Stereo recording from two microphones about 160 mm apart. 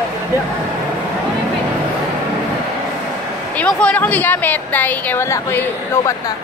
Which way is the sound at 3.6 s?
5° left (ahead or behind).